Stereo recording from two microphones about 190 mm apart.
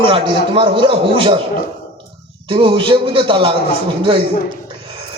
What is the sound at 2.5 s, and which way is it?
A man's voice, 25° right (ahead or behind).